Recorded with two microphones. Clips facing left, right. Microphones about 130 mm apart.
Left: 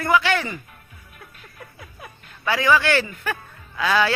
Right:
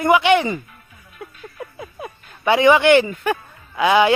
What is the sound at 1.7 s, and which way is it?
A man's voice, 25° right (ahead or behind).